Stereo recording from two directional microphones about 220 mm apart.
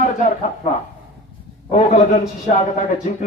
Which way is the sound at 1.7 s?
35° left (ahead or behind).